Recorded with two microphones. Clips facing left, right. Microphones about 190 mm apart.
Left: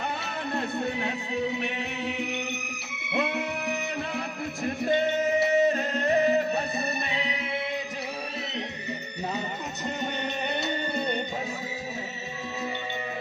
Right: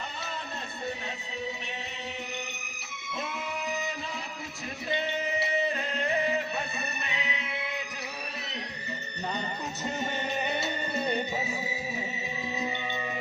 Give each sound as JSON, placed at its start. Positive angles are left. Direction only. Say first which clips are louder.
{"t": 1.0, "sound": "music", "louder": "left 7 dB", "side_deg": 65}
{"t": 3.1, "sound": "music", "louder": "left 7 dB", "side_deg": 65}
{"t": 4.6, "sound": "music", "louder": "left 8 dB", "side_deg": 50}
{"t": 9.8, "sound": "music", "louder": "left 2 dB", "side_deg": 0}